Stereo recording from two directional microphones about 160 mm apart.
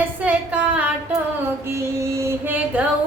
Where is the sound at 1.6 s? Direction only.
15° right (ahead or behind).